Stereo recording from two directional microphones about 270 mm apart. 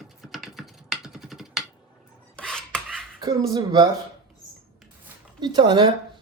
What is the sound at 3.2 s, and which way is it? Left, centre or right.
Speech, centre.